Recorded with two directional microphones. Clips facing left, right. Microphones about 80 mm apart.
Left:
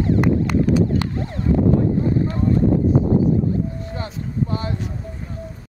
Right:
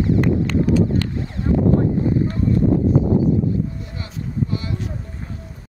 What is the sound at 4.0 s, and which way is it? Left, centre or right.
Vehicle, left.